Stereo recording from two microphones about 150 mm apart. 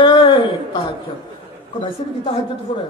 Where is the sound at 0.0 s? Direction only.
30° left (ahead or behind).